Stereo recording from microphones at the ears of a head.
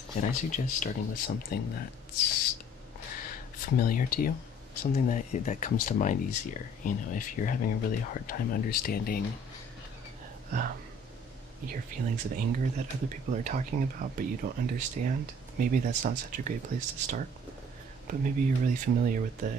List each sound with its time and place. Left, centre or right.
0.1 s speech: left
11.6 s speech: right